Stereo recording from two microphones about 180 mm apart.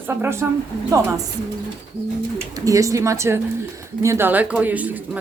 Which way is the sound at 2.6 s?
20° right (ahead or behind).